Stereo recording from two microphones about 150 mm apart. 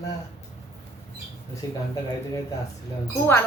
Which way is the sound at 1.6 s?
25° left (ahead or behind).